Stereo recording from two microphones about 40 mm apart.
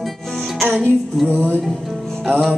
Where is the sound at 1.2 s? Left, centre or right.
Right.